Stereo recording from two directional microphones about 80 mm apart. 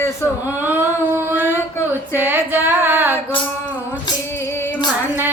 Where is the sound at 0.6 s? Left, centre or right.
Right.